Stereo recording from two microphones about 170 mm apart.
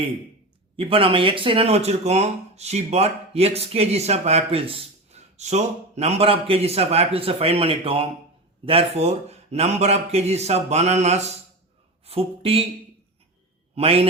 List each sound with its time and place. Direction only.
0.8 s speech: 30° right (ahead or behind)
13.7 s speech: 35° right (ahead or behind)